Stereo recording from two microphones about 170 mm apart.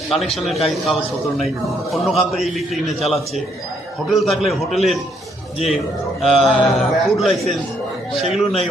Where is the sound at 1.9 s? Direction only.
Centre (ahead or behind).